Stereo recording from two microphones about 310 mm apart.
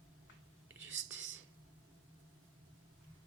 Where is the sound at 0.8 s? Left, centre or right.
Right.